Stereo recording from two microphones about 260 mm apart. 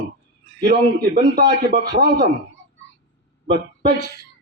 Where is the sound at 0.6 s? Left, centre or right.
Right.